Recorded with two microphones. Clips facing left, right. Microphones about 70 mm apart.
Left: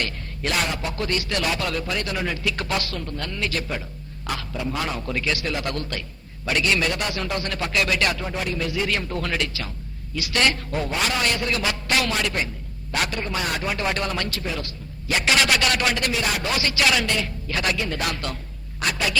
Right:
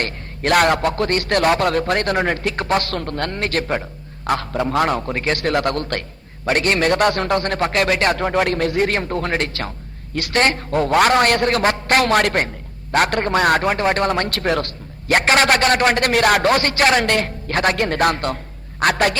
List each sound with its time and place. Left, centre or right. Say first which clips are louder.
0.0 s a man's voice: right 5 dB; right
8.2 s a man's voice: right 9 dB; right
9.5 s a man's voice: right 6 dB; right